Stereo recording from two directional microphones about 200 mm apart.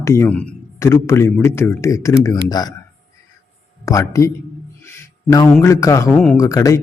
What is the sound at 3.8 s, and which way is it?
A man's voice, 15° left (ahead or behind).